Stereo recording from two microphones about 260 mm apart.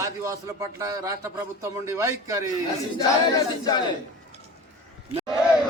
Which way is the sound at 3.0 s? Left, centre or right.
Centre.